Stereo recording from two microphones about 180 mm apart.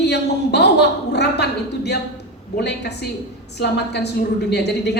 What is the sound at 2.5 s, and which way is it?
A woman's voice, 70° left (ahead or behind).